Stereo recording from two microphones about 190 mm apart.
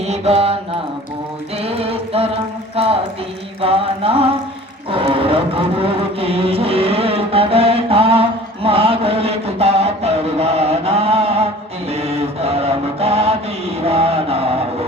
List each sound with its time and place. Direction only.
0.0 s mantra: 35° right (ahead or behind)
1.6 s a sound: 30° right (ahead or behind)
2.7 s clip-clop: 30° right (ahead or behind)
3.6 s mantra: 30° right (ahead or behind)
4.9 s music: 30° right (ahead or behind)
11.9 s mantra: 30° right (ahead or behind)
13.8 s a sound: 30° right (ahead or behind)